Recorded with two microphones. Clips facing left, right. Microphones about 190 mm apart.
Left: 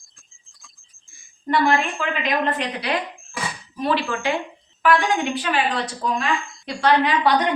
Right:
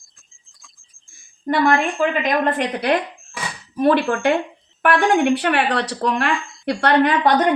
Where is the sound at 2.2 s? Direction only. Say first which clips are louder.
Right 4 dB; 50° right (ahead or behind).